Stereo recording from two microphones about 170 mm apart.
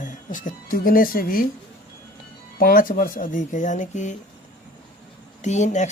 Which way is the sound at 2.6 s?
60° left (ahead or behind).